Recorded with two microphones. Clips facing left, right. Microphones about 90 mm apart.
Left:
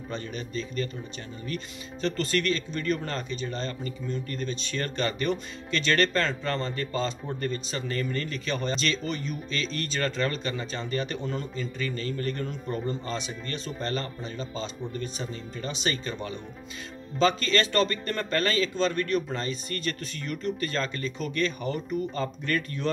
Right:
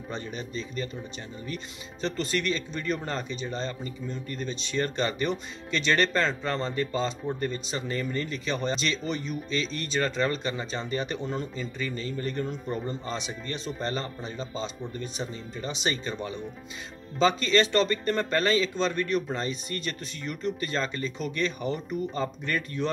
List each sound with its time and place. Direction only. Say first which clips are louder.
0.1 s speech: left 1 dB; 15° right (ahead or behind)